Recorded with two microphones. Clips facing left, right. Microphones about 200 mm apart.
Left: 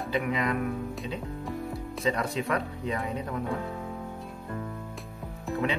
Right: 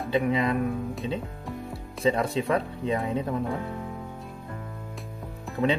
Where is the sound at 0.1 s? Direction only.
30° right (ahead or behind).